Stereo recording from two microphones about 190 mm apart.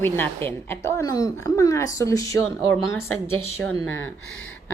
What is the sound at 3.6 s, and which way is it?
Speech, 10° left (ahead or behind).